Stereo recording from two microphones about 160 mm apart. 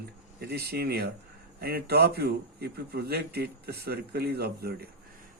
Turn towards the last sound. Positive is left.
turn(degrees=-80)